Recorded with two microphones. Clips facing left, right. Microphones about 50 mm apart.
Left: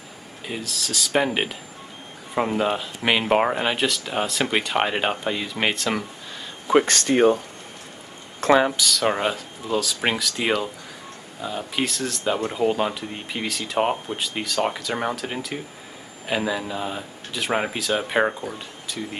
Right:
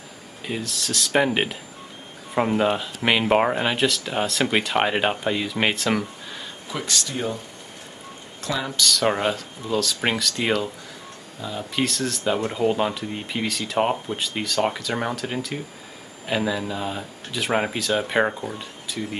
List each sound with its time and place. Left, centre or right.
0.5 s speech: centre
6.7 s speech: left
8.4 s speech: left
8.7 s speech: centre